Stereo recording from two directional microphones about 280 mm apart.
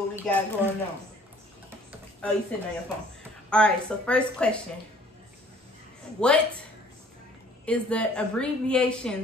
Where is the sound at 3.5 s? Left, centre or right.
Centre.